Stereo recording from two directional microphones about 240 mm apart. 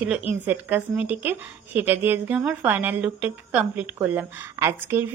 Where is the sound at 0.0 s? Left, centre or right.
Centre.